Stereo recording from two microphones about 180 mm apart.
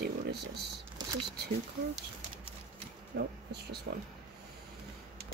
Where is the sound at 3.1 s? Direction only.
65° right (ahead or behind).